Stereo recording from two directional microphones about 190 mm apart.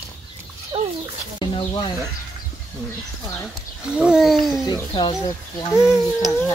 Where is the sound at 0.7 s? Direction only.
30° right (ahead or behind).